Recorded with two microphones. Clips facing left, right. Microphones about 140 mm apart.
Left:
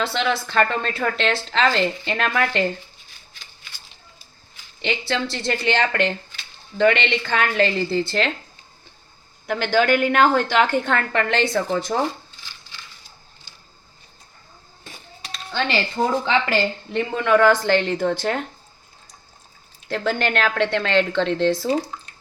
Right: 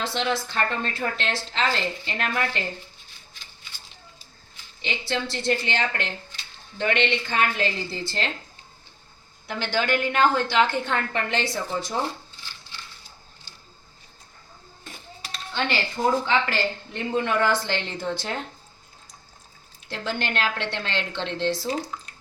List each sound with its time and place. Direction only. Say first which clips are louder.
0.0 s a woman's voice: left 4 dB; 80° left
4.8 s a woman's voice: left 4 dB; 85° left
9.5 s a woman's voice: left 6 dB; 50° left (ahead or behind); by 11.4 s 85° left
11.9 s speech: left 5 dB; 70° left (ahead or behind)
16.2 s a woman's voice: left 4 dB; 90° left; by 17.5 s 70° left (ahead or behind)
17.5 s a woman's voice: left 8 dB; 50° left (ahead or behind)
19.9 s a woman's voice: left 7 dB; 55° left (ahead or behind)